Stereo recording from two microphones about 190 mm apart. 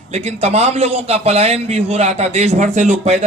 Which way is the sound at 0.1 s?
35° right (ahead or behind).